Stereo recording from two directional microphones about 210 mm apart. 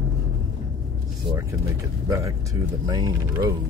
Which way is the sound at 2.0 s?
15° right (ahead or behind).